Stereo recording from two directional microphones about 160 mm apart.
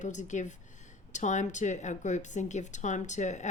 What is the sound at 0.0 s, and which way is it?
A woman's voice, 50° left (ahead or behind).